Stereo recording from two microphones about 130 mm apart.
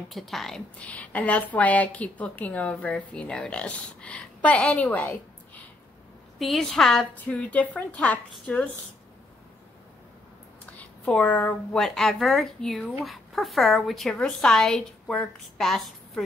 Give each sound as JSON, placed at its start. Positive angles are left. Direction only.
{"t": 0.1, "sound": "a woman's voice", "side_deg": 0}
{"t": 6.4, "sound": "a woman's voice", "side_deg": 0}
{"t": 10.8, "sound": "a woman's voice", "side_deg": 10}